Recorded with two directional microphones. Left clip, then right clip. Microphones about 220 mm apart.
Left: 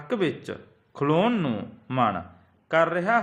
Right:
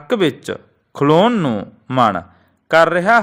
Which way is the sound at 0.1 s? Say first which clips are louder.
Right 10 dB; 40° right (ahead or behind).